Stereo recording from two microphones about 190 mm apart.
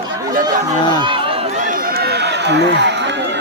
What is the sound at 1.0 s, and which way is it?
Run, 25° right (ahead or behind).